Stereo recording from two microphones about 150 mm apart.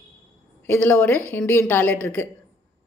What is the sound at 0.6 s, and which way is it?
A woman's voice, 10° left (ahead or behind).